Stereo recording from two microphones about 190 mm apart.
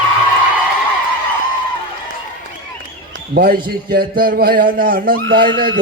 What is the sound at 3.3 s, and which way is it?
A man's voice, 50° right (ahead or behind).